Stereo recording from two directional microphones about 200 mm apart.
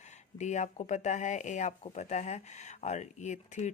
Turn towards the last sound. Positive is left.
turn(degrees=35)  # may be behind; listen again after turning